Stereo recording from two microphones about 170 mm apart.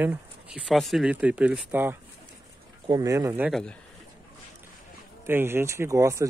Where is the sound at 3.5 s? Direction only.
5° left (ahead or behind).